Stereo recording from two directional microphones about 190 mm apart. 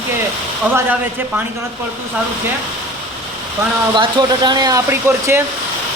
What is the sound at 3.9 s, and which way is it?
Speech, 20° right (ahead or behind).